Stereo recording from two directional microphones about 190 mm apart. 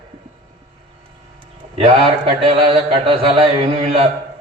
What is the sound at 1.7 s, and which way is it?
A man's voice, 30° right (ahead or behind).